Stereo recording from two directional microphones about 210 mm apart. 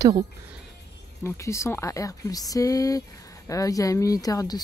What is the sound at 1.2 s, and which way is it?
Speech, 15° left (ahead or behind).